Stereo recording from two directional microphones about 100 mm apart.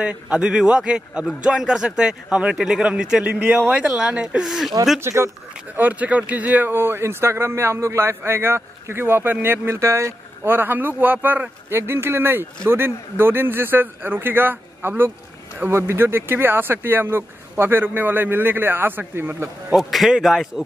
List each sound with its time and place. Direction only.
0.0 s a man's voice: 10° right (ahead or behind)
5.0 s speech: 25° right (ahead or behind)
5.8 s speech: 15° right (ahead or behind)
19.7 s a man's voice: centre (ahead or behind)